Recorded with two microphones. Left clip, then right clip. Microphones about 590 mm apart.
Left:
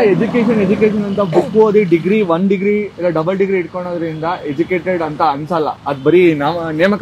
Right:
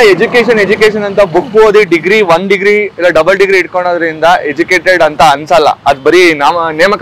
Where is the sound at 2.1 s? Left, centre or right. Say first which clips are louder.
Right 8 dB; right.